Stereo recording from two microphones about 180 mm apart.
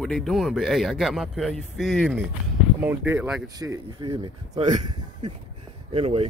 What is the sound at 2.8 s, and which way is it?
Speech, 10° right (ahead or behind).